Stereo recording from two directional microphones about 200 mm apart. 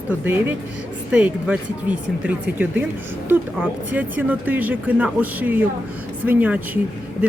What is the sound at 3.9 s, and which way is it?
Speech, 10° right (ahead or behind).